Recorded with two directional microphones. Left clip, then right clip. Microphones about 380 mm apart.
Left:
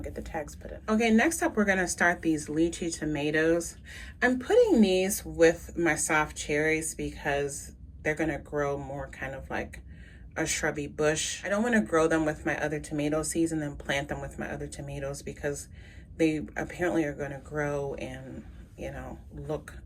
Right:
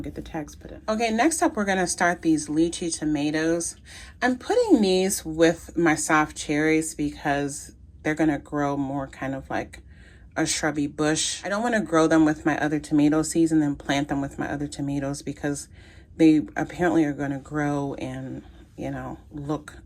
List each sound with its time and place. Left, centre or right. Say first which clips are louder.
0.0 s speech: right 2 dB; centre